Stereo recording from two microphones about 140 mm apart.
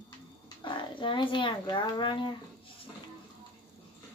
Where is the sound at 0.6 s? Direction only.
35° left (ahead or behind).